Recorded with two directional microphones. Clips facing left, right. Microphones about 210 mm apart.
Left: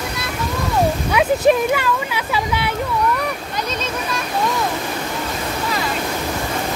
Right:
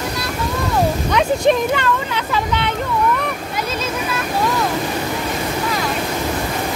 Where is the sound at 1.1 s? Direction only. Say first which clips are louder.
Left 1 dB; 5° left (ahead or behind).